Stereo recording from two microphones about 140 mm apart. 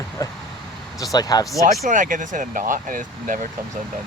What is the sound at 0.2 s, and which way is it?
Vehicle, 25° left (ahead or behind).